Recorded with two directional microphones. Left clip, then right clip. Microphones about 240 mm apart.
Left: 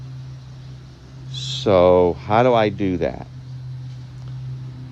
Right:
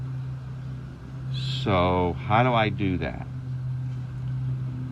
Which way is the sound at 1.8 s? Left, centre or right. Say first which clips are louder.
Left 12 dB; left.